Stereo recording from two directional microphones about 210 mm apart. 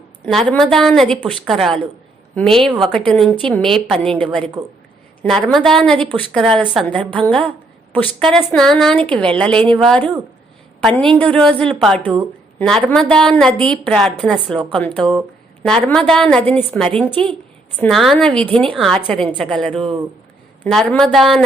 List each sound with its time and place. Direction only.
0.3 s a woman's voice: centre (ahead or behind)
4.6 s a man's voice: 25° right (ahead or behind)
5.5 s a woman's voice: centre (ahead or behind)
10.8 s a woman's voice: 5° left (ahead or behind)
19.7 s a man's voice: 25° right (ahead or behind)
20.7 s a woman's voice: centre (ahead or behind)